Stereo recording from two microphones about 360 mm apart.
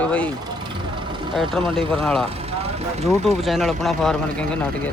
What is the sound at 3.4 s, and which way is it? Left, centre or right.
Speech, centre.